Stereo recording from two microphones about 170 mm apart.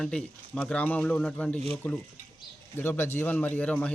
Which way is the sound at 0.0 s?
5° left (ahead or behind).